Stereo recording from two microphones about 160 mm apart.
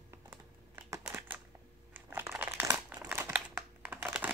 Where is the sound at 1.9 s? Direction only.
15° right (ahead or behind).